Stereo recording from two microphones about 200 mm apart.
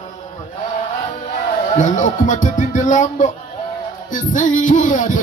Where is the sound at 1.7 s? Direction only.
40° left (ahead or behind).